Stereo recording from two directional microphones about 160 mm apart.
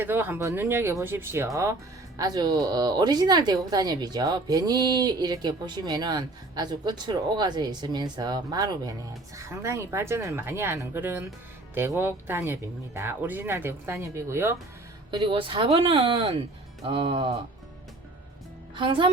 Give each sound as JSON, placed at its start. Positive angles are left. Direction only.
{"t": 0.0, "sound": "speech", "side_deg": -15}
{"t": 15.1, "sound": "speech", "side_deg": -30}
{"t": 18.8, "sound": "speech", "side_deg": -30}